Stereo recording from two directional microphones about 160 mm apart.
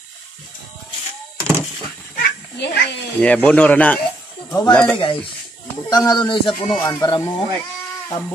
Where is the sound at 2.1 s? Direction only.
85° left.